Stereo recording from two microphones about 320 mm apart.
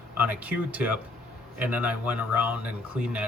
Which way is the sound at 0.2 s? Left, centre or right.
Centre.